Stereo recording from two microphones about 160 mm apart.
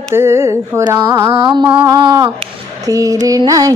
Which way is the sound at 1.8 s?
25° right (ahead or behind).